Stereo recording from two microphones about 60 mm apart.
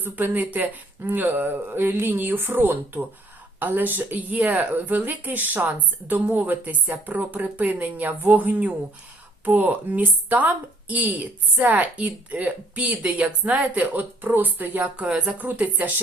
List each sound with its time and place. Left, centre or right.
0.0 s a woman's voice: right
14.9 s a woman's voice: centre